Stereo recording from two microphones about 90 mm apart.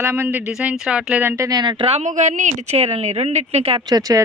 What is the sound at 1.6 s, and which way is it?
Speech, 65° right (ahead or behind).